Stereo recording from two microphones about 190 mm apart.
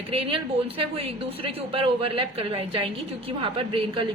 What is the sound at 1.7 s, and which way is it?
Speech, 30° right (ahead or behind).